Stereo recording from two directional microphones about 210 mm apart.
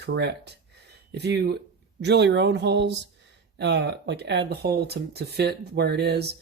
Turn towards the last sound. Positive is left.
turn(degrees=-50)  # may be behind; listen again after turning